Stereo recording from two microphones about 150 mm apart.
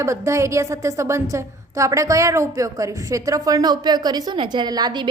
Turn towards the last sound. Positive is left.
turn(degrees=-30)  # may be behind; listen again after turning